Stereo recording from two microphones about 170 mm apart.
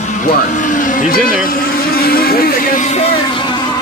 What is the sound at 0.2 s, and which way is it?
Vehicle, 50° left (ahead or behind).